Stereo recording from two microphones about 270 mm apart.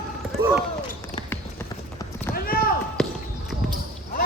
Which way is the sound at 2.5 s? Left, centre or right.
Left.